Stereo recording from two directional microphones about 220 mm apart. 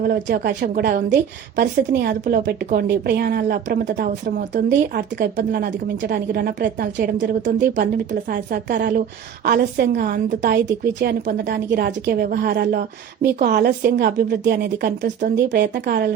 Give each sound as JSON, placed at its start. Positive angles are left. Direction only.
{"t": 0.0, "sound": "a woman's voice", "side_deg": -40}
{"t": 15.0, "sound": "a woman's voice", "side_deg": -35}
{"t": 15.5, "sound": "speech", "side_deg": -50}